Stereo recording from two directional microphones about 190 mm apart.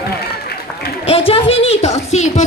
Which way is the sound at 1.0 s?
30° left (ahead or behind).